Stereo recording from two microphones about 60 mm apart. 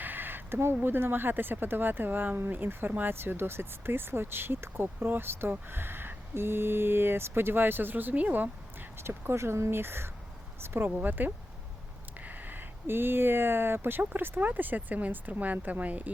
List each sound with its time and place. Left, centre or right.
0.0 s a sound: right
0.8 s speech: right
9.0 s speech: right